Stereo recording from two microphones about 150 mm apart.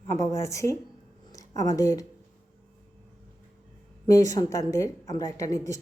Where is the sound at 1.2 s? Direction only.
25° left (ahead or behind).